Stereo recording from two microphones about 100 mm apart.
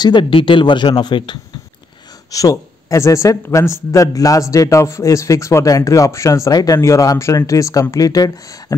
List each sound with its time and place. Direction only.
0.0 s speech: 50° left (ahead or behind)
2.3 s speech: 35° left (ahead or behind)